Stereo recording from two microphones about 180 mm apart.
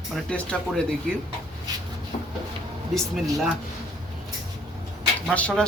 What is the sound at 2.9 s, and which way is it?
Speech, centre (ahead or behind).